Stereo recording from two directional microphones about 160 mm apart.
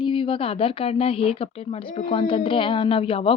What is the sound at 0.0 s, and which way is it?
A woman's voice, 30° left (ahead or behind).